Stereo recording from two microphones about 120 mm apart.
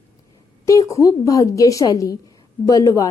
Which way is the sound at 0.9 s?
25° left (ahead or behind).